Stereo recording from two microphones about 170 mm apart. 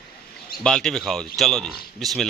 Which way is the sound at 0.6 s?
5° left (ahead or behind).